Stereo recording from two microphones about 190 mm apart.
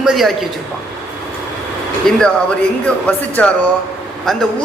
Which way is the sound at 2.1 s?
Centre (ahead or behind).